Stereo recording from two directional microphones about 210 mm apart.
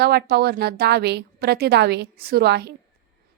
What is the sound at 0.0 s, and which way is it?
A woman's voice, 50° right (ahead or behind).